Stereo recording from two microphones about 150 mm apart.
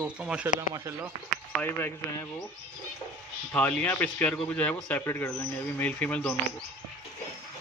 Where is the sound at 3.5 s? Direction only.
10° left (ahead or behind).